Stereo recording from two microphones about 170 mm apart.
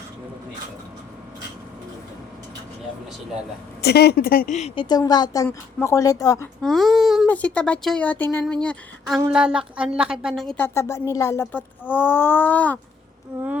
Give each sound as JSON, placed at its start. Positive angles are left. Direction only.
{"t": 3.8, "sound": "a woman's voice", "side_deg": 70}
{"t": 6.6, "sound": "speech", "side_deg": 0}
{"t": 10.8, "sound": "speech", "side_deg": 15}